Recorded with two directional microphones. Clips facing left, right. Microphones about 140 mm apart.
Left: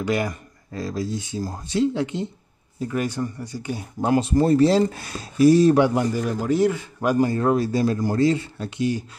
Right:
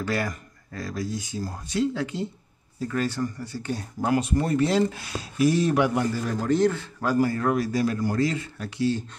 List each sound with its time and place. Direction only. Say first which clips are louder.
0.0 s a man's voice: left 4 dB; 20° left (ahead or behind)
4.0 s speech: left 5 dB; 25° left (ahead or behind)
6.1 s a man's voice: left 2 dB; 10° left (ahead or behind)